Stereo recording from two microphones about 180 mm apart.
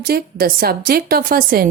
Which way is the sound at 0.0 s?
60° right (ahead or behind).